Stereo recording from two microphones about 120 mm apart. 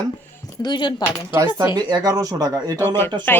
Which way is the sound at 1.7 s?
35° right (ahead or behind).